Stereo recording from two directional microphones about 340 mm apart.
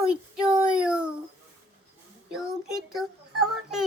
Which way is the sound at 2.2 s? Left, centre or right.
Centre.